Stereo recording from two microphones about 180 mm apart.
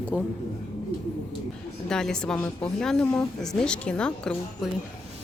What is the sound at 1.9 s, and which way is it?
Speech, 5° left (ahead or behind).